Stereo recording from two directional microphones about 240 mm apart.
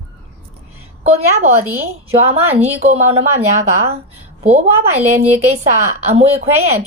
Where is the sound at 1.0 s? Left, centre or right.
Right.